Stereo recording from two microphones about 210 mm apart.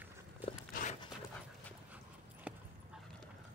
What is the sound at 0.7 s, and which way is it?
Dog, 40° left (ahead or behind).